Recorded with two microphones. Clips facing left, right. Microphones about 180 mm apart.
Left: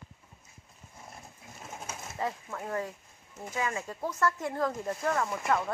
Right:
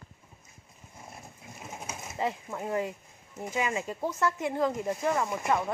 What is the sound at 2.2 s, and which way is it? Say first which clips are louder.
Speech: right 3 dB; 20° right (ahead or behind).